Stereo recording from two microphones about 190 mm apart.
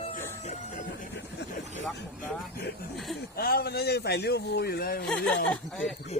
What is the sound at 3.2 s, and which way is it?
Speech, 55° left (ahead or behind).